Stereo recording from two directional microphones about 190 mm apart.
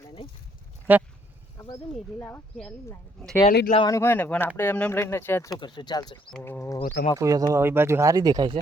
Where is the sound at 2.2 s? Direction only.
10° left (ahead or behind).